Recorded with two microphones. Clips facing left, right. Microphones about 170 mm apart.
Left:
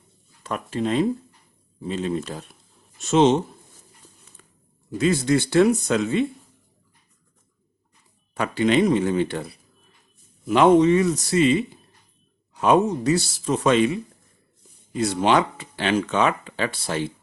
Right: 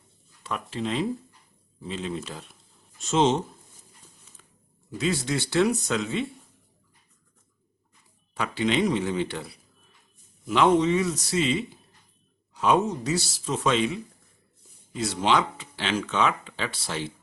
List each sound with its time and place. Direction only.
0.4 s speech: 50° left (ahead or behind)
3.1 s speech: 60° left (ahead or behind)
4.4 s a sound: 55° left (ahead or behind)
4.9 s speech: 50° left (ahead or behind)
8.4 s speech: 50° left (ahead or behind)